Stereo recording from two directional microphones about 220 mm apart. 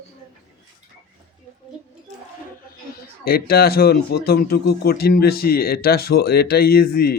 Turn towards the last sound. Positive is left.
turn(degrees=45)  # may be behind; listen again after turning